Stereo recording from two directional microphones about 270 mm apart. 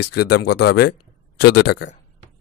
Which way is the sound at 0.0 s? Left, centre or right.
Left.